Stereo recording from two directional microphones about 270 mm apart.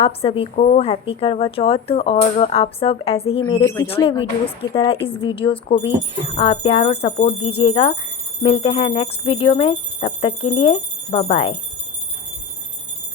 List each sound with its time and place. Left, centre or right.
0.0 s a woman's voice: left